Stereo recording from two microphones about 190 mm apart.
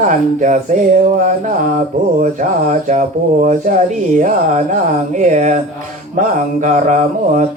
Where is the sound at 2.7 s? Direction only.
40° right (ahead or behind).